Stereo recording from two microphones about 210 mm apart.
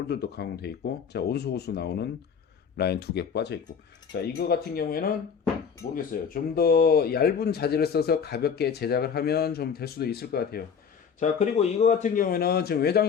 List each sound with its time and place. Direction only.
0.1 s speech: 50° left (ahead or behind)
11.2 s speech: 30° left (ahead or behind); by 13.1 s 50° left (ahead or behind)